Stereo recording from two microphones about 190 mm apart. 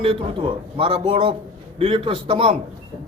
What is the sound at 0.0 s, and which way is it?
Speech, 30° right (ahead or behind).